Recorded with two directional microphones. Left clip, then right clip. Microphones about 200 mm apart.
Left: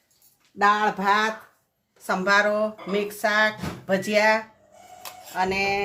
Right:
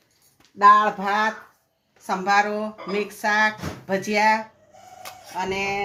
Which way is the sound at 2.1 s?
20° left (ahead or behind).